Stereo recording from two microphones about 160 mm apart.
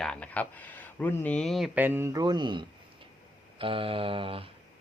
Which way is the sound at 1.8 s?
15° right (ahead or behind).